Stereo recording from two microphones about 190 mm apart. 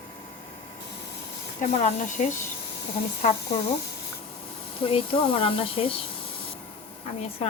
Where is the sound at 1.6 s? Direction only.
40° left (ahead or behind).